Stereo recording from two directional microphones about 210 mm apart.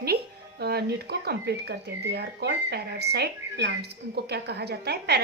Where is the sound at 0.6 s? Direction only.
50° right (ahead or behind).